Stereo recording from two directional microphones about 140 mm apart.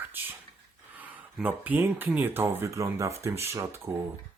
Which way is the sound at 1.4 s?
15° right (ahead or behind).